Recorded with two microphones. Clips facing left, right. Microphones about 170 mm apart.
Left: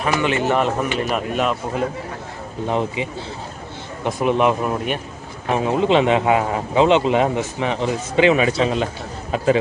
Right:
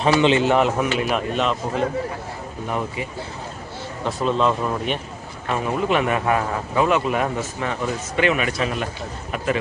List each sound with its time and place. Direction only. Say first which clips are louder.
0.0 s speech: right 3 dB; 25° right (ahead or behind)
0.9 s speech: left 1 dB; centre (ahead or behind)
2.6 s speech: left 5 dB; 25° left (ahead or behind)
5.5 s speech: left 4 dB; 20° left (ahead or behind)